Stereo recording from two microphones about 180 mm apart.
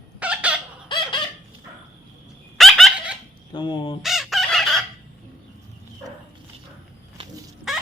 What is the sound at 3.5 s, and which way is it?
Crow, 25° left (ahead or behind).